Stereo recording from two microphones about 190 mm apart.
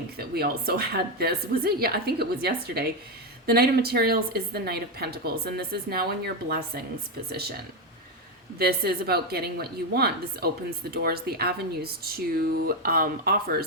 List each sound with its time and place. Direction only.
0.2 s speech: 55° right (ahead or behind)
8.5 s speech: 55° right (ahead or behind)